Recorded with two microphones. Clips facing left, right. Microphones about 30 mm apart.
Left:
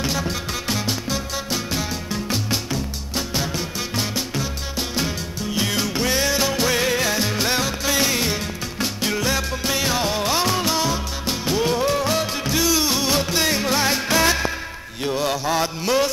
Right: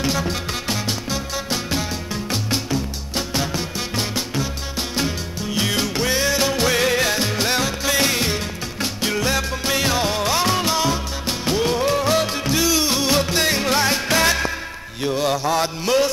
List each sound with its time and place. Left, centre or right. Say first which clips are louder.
0.0 s music: right 2 dB; centre
15.0 s mantra: right 2 dB; centre
15.8 s music: right 2 dB; centre